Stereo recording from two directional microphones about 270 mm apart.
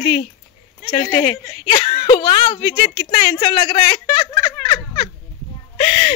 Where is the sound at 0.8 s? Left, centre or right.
Centre.